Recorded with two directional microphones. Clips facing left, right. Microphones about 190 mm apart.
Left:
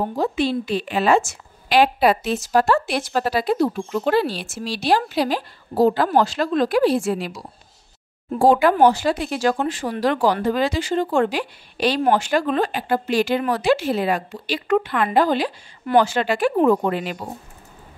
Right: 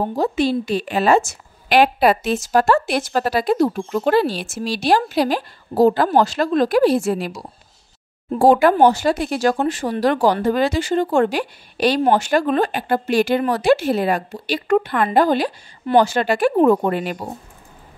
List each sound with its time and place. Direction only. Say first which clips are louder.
0.1 s a woman's voice: right 2 dB; 40° right (ahead or behind)
8.5 s a woman's voice: right 2 dB; 50° right (ahead or behind)
15.8 s a woman's voice: right 2 dB; 25° right (ahead or behind)
16.2 s a woman's voice: right 3 dB; 40° right (ahead or behind)